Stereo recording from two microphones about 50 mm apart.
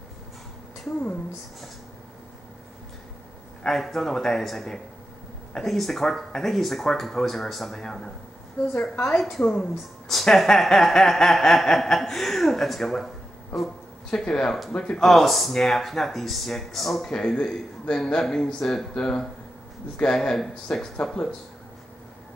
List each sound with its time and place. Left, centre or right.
3.6 s speech: centre
7.8 s speech: centre
8.7 s a woman's voice: left
9.6 s speech: centre
14.1 s speech: centre
15.0 s speech: centre
17.1 s speech: centre